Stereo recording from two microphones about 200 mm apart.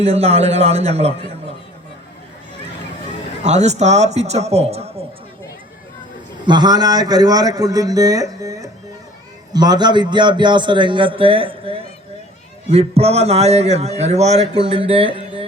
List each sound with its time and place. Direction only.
0.0 s a man's voice: 30° right (ahead or behind)
3.4 s a man's voice: 35° right (ahead or behind)
6.4 s a man's voice: 20° right (ahead or behind)